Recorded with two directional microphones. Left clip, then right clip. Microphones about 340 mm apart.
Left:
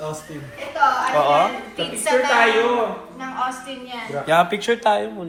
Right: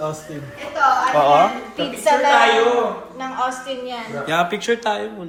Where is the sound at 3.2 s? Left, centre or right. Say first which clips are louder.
Right 2 dB; centre.